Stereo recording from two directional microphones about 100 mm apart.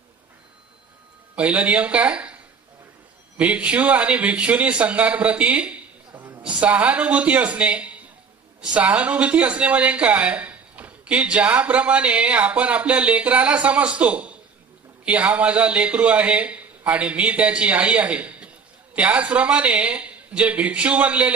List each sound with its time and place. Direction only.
1.4 s speech: 15° right (ahead or behind)
3.3 s speech: 10° right (ahead or behind)
6.1 s a sound: 20° right (ahead or behind)
6.4 s speech: 15° right (ahead or behind)